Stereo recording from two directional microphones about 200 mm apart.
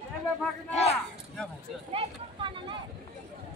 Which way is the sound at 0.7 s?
30° left (ahead or behind).